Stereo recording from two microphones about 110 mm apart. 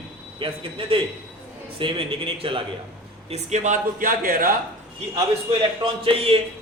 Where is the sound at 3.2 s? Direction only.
80° right.